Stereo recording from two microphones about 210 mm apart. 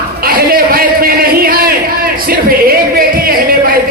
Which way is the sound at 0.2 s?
45° right (ahead or behind).